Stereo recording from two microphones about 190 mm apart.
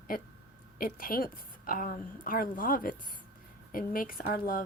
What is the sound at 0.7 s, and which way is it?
A woman's voice, 50° left (ahead or behind).